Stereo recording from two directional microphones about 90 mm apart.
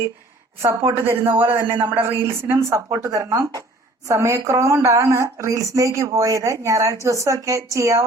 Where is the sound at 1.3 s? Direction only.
25° right (ahead or behind).